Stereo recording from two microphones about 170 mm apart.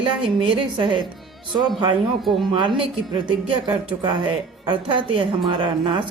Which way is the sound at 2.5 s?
30° right (ahead or behind).